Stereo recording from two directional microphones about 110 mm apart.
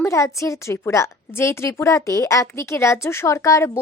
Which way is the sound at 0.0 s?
30° left (ahead or behind).